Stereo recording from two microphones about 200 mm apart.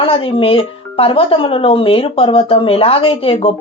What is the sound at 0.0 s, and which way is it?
Speech, 25° left (ahead or behind).